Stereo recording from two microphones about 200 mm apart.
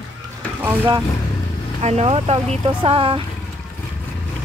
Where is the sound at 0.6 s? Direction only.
10° right (ahead or behind).